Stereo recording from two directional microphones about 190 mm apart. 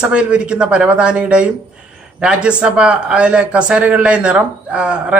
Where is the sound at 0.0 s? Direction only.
5° right (ahead or behind).